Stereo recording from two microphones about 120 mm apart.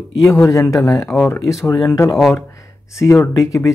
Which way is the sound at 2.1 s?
Centre (ahead or behind).